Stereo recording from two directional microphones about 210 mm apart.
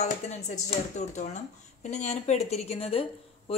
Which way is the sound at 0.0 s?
30° left (ahead or behind).